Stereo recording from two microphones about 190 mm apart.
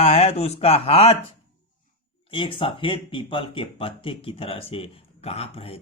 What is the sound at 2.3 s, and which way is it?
Speech, 25° left (ahead or behind).